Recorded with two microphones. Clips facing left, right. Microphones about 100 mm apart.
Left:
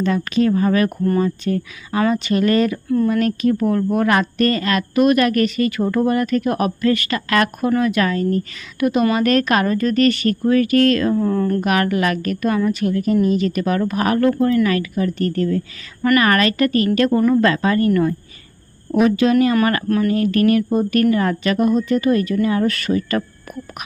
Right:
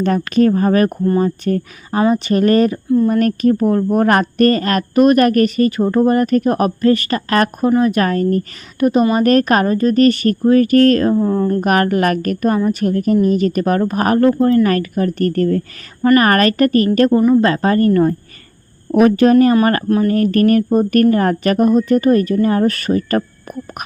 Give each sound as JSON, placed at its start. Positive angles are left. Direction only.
{"t": 0.0, "sound": "speech", "side_deg": -50}
{"t": 8.8, "sound": "speech", "side_deg": -35}
{"t": 11.1, "sound": "speech", "side_deg": -25}
{"t": 11.6, "sound": "speech", "side_deg": -45}
{"t": 14.3, "sound": "speech", "side_deg": -30}
{"t": 14.7, "sound": "speech", "side_deg": -50}
{"t": 16.0, "sound": "speech", "side_deg": -30}
{"t": 16.2, "sound": "speech", "side_deg": -45}
{"t": 17.1, "sound": "speech", "side_deg": -20}
{"t": 17.4, "sound": "speech", "side_deg": -40}
{"t": 18.9, "sound": "speech", "side_deg": -50}
{"t": 19.9, "sound": "speech", "side_deg": -30}
{"t": 20.1, "sound": "speech", "side_deg": -45}